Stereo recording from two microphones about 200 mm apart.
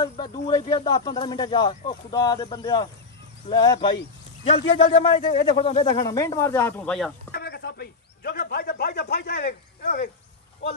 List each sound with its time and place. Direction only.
0.0 s a man's voice: 20° left (ahead or behind); by 7.1 s 5° left (ahead or behind)
7.3 s a man's voice: 55° left (ahead or behind)